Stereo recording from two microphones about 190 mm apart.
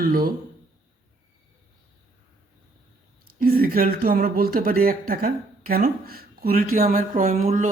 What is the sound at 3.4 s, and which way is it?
Speech, 50° right (ahead or behind).